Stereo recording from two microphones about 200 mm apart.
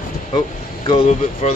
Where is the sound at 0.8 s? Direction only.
30° left (ahead or behind).